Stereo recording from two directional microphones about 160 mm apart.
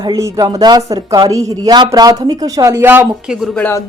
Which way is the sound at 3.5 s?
10° left (ahead or behind).